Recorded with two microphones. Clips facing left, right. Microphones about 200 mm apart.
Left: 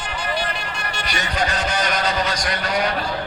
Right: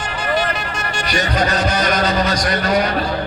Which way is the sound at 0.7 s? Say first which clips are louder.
Right 6 dB; 45° right (ahead or behind).